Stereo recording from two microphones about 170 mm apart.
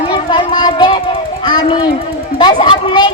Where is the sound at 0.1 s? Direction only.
30° left (ahead or behind).